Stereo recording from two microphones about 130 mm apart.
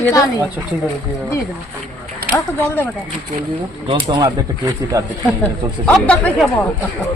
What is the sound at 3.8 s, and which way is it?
Speech, 40° right (ahead or behind).